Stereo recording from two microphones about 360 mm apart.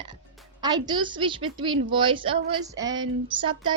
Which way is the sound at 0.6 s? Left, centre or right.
Centre.